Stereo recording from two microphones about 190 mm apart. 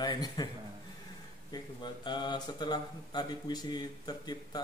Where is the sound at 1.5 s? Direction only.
25° left (ahead or behind).